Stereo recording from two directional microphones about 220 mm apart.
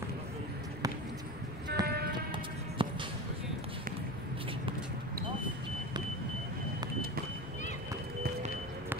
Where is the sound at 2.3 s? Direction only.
20° right (ahead or behind).